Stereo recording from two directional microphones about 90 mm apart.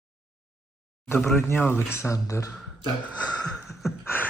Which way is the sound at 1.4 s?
25° left (ahead or behind).